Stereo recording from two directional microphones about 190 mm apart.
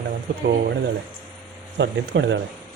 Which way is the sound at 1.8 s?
70° right (ahead or behind).